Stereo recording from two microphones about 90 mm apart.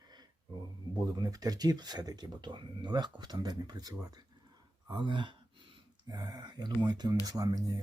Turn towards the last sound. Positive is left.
turn(degrees=-50)  # may be behind; listen again after turning